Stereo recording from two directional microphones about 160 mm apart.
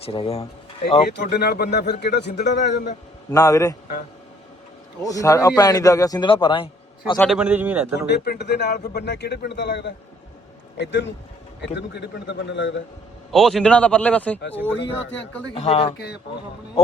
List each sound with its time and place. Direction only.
0.0 s speech: 35° left (ahead or behind)
1.3 s speech: 90° left
3.2 s a man's voice: 20° left (ahead or behind)
5.0 s a man's voice: 20° left (ahead or behind)
7.2 s a man's voice: centre (ahead or behind)
7.9 s speech: 90° left
13.3 s a man's voice: centre (ahead or behind)
14.4 s speech: 90° left
15.5 s speech: 40° left (ahead or behind)